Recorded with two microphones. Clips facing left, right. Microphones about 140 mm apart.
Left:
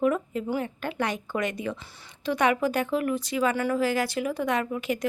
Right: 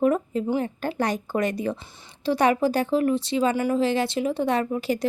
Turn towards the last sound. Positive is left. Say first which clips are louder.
# right 3 dB
turn(degrees=-35)  # may be behind; listen again after turning